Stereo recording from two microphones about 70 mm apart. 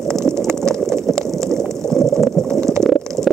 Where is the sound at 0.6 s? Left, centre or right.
Centre.